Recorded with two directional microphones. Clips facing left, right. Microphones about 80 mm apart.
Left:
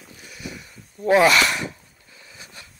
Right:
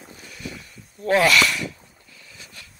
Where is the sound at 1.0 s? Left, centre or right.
Centre.